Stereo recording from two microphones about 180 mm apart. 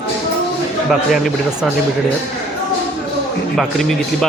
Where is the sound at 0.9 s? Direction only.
Centre (ahead or behind).